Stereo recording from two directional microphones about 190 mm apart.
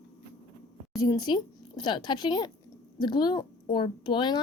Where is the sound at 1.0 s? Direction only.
20° left (ahead or behind).